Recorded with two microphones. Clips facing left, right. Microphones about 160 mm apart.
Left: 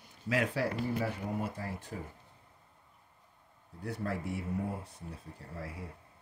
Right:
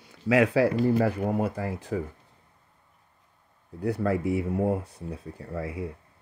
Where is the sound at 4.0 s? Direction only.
90° right.